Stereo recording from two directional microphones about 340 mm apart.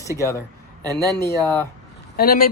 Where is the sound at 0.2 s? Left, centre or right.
Centre.